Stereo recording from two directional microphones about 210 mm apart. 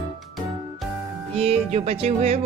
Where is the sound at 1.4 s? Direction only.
30° right (ahead or behind).